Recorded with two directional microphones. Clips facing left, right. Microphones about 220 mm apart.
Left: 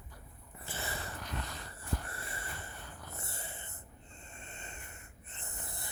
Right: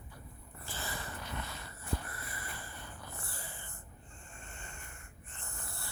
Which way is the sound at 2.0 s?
30° left (ahead or behind).